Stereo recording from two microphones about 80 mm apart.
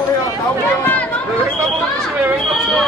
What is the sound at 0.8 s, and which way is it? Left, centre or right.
Run, left.